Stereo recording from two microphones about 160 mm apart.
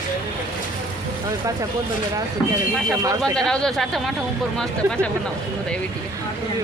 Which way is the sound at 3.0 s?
20° right (ahead or behind).